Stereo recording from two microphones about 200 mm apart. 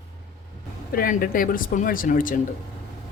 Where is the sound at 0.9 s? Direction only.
45° left (ahead or behind).